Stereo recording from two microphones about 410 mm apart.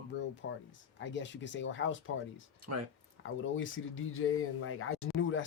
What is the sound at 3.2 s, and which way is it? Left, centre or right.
Speech, left.